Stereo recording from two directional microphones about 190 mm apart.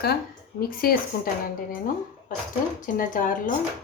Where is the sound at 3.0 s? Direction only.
45° left (ahead or behind).